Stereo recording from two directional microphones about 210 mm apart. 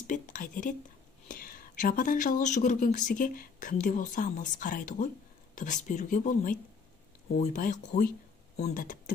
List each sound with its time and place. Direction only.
0.0 s speech: 40° left (ahead or behind)